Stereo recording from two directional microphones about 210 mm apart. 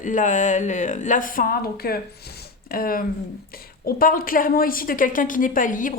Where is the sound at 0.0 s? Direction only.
35° left (ahead or behind).